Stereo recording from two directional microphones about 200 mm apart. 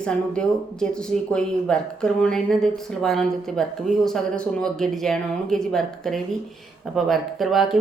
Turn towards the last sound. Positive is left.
turn(degrees=0)  # may be behind; listen again after turning